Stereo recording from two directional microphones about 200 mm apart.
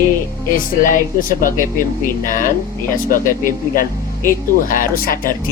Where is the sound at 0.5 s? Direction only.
45° left (ahead or behind).